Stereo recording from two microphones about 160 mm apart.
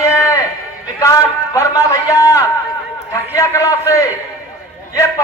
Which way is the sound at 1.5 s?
20° left (ahead or behind).